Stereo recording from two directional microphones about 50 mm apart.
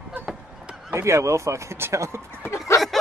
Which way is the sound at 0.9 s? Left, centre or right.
Right.